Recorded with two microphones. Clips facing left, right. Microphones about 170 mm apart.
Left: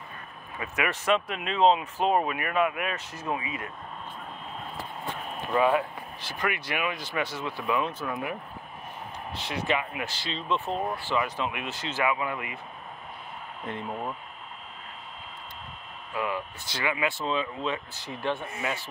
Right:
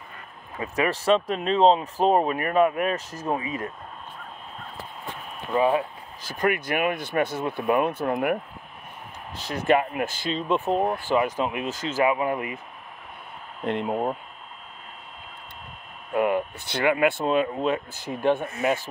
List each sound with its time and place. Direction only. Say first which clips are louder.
0.6 s speech: right 5 dB; 35° right (ahead or behind)
5.6 s speech: right 2 dB; 25° right (ahead or behind)
6.2 s speech: right 7 dB; 45° right (ahead or behind)
9.3 s speech: right 7 dB; 45° right (ahead or behind)
13.7 s speech: right 9 dB; 70° right (ahead or behind)
16.1 s speech: right 8 dB; 55° right (ahead or behind)